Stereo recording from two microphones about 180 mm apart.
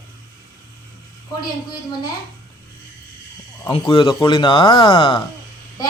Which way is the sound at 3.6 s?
25° left (ahead or behind).